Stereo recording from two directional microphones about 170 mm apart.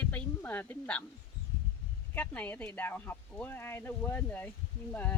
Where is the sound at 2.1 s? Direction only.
10° left (ahead or behind).